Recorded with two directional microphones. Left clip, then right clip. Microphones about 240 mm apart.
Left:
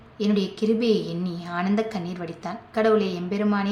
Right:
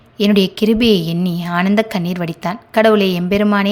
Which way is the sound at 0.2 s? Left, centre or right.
Right.